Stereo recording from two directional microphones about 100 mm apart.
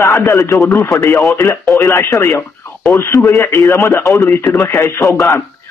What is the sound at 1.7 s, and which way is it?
Speech, 25° left (ahead or behind).